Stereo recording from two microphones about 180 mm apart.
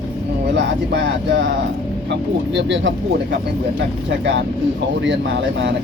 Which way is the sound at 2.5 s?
90° right.